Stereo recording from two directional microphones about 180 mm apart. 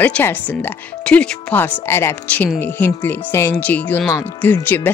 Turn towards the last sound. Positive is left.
turn(degrees=10)  # may be behind; listen again after turning